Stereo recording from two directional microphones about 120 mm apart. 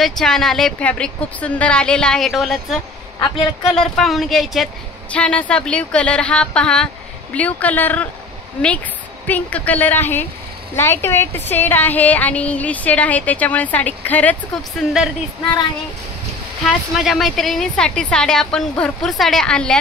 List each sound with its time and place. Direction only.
0.0 s a woman's voice: 5° left (ahead or behind)
3.2 s a woman's voice: 45° left (ahead or behind)
3.7 s a woman's voice: 5° left (ahead or behind)
9.3 s a woman's voice: 15° left (ahead or behind)
14.8 s a woman's voice: centre (ahead or behind)
17.0 s a woman's voice: centre (ahead or behind)